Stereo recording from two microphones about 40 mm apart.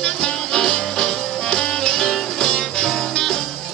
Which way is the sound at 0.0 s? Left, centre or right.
Centre.